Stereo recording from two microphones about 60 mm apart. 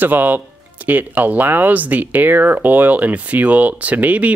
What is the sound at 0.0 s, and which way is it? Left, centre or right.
Speech, right.